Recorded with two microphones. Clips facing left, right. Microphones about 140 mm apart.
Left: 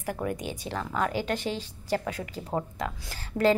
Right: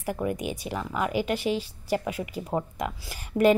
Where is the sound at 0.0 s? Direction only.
10° right (ahead or behind).